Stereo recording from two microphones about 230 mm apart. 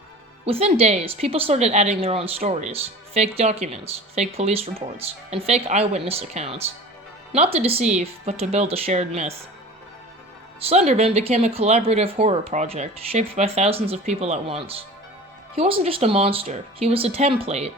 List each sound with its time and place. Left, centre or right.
0.4 s a woman's voice: right
10.6 s a woman's voice: right